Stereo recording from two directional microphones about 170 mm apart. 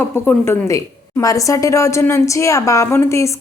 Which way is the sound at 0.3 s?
15° left (ahead or behind).